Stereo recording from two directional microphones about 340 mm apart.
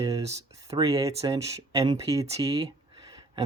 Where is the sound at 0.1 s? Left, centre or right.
Centre.